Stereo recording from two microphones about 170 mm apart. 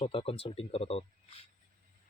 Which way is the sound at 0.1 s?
35° left (ahead or behind).